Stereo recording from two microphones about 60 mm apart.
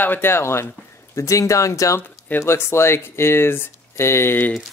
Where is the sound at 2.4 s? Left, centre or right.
Left.